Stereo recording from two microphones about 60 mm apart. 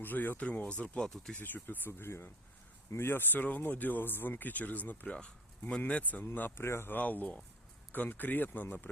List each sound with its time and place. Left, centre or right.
0.0 s speech: left; by 1.4 s centre
1.4 s speech: left
6.2 s speech: left
6.9 s speech: left